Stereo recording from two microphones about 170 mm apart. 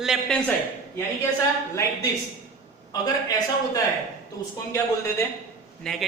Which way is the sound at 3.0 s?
20° left (ahead or behind).